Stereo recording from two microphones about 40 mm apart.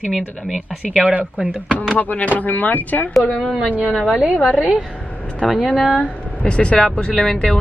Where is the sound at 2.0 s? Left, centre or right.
Left.